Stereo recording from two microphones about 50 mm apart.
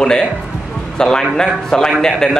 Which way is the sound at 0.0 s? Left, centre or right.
Centre.